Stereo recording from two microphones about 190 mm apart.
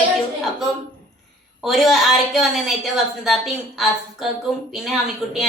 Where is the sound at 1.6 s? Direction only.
Centre (ahead or behind).